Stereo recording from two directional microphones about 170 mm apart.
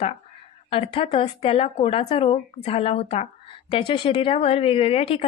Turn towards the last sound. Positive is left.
turn(degrees=35)  # may be behind; listen again after turning